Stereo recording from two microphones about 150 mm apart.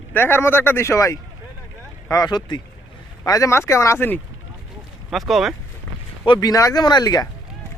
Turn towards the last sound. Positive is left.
turn(degrees=25)  # may be behind; listen again after turning